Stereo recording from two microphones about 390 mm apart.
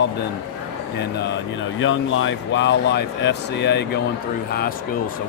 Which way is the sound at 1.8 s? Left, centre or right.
Left.